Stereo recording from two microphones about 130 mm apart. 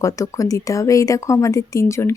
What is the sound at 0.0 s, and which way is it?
Speech, 25° left (ahead or behind).